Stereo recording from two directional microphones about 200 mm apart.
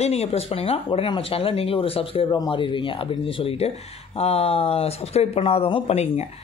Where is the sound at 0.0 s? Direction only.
30° left (ahead or behind).